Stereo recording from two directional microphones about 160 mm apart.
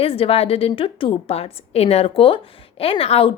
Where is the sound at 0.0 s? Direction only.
35° left (ahead or behind).